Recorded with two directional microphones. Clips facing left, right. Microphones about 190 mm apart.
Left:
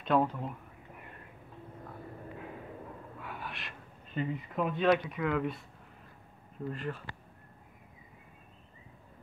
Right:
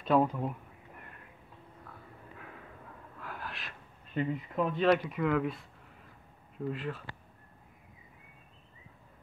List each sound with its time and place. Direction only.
0.0 s speech: 5° right (ahead or behind)
1.9 s vehicle: 25° left (ahead or behind)
3.2 s speech: centre (ahead or behind)
6.7 s speech: centre (ahead or behind)